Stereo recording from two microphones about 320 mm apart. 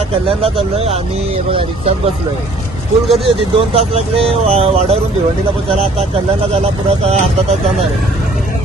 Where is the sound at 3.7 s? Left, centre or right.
Centre.